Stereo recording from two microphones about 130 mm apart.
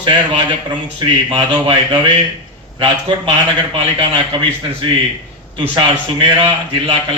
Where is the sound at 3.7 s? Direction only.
45° right (ahead or behind).